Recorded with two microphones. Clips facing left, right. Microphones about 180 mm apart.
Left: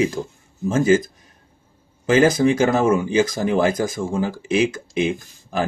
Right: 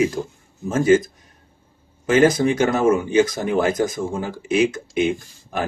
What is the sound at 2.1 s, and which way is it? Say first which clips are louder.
Speech: even; 30° left (ahead or behind).